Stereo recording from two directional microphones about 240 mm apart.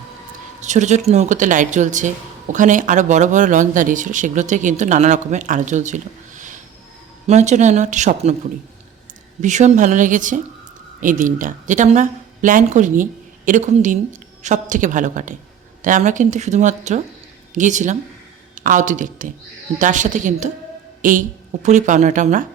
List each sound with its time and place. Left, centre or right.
0.6 s speech: right
9.4 s speech: right